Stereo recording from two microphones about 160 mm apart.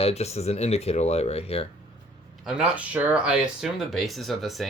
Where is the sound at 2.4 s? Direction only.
5° right (ahead or behind).